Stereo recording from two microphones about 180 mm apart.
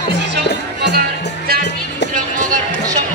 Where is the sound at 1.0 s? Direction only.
60° right (ahead or behind).